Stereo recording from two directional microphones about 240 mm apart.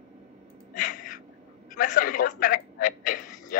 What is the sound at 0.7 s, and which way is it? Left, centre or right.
A man's voice, left.